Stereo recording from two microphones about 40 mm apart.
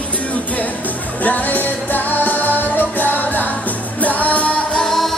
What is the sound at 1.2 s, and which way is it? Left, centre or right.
Music, left.